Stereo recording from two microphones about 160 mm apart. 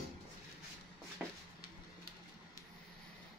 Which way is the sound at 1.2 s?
10° right (ahead or behind).